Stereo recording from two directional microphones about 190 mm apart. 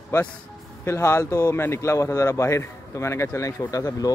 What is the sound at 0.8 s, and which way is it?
A man's voice, 15° left (ahead or behind).